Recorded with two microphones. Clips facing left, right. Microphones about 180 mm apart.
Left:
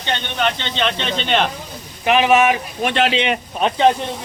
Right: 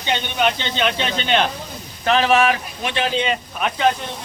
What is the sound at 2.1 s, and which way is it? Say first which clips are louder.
Speech: left 2 dB; 15° left (ahead or behind).